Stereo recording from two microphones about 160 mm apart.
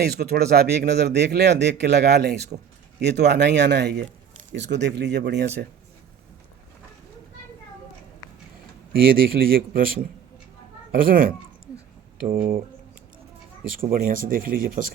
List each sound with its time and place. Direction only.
0.0 s speech: 80° right
9.2 s speech: 65° right (ahead or behind)
13.7 s speech: 60° right (ahead or behind)